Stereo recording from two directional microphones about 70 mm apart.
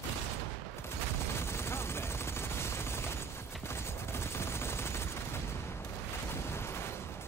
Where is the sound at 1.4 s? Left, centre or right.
Left.